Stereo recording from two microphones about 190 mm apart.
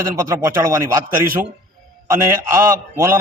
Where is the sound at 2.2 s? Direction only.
15° right (ahead or behind).